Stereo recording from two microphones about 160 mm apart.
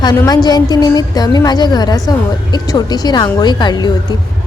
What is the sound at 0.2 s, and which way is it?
A woman's voice, 25° left (ahead or behind).